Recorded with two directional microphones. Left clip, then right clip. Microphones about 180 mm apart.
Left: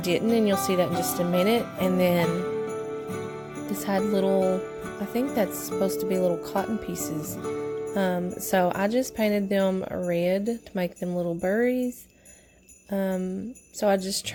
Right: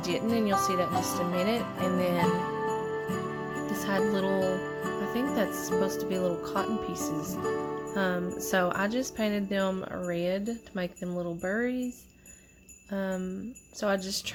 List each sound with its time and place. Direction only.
0.0 s speech: 45° left (ahead or behind)
3.8 s music: 30° left (ahead or behind)
4.9 s a woman's voice: 30° left (ahead or behind)
12.9 s a woman's voice: 35° left (ahead or behind)